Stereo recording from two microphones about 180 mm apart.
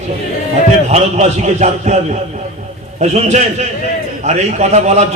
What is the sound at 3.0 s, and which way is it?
A man's voice, 40° right (ahead or behind).